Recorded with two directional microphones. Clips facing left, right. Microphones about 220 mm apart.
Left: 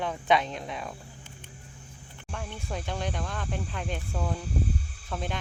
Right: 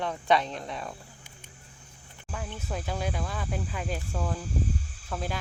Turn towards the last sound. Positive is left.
turn(degrees=-5)  # may be behind; listen again after turning